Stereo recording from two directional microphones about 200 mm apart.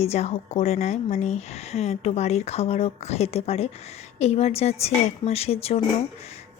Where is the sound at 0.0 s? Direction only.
30° left (ahead or behind).